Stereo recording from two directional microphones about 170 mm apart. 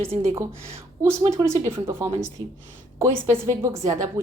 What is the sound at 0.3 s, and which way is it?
Speech, 15° right (ahead or behind).